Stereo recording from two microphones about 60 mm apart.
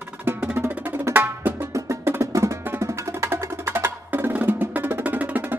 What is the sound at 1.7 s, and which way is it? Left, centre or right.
Music, right.